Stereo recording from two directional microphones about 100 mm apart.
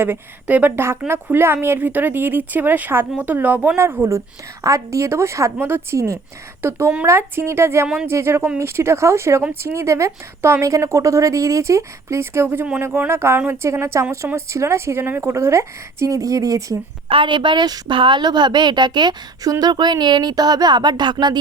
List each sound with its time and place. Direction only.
0.0 s speech: 20° right (ahead or behind); by 16.7 s 35° right (ahead or behind)
17.1 s a woman's voice: 55° right (ahead or behind)